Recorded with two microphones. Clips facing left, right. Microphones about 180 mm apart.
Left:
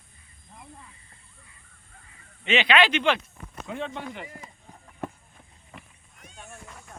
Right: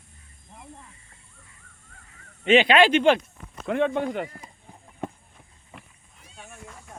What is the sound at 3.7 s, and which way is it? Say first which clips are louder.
Speech: right 10 dB; 60° right (ahead or behind).